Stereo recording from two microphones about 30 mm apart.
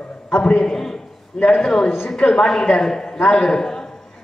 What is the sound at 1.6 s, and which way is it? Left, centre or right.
A woman's voice, left.